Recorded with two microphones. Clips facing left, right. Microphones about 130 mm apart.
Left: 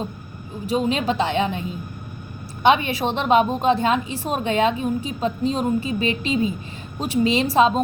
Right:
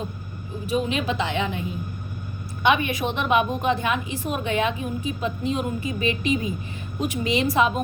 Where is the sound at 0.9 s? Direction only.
30° left (ahead or behind).